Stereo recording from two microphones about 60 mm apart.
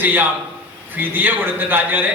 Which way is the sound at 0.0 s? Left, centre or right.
Right.